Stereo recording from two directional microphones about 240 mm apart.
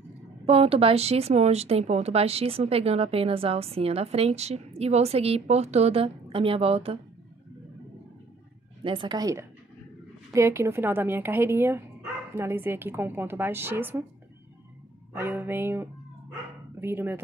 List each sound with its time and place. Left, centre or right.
0.5 s speech: right
8.8 s a woman's voice: centre
15.1 s a woman's voice: centre